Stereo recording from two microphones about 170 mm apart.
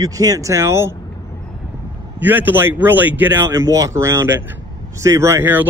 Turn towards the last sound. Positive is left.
turn(degrees=-15)  # may be behind; listen again after turning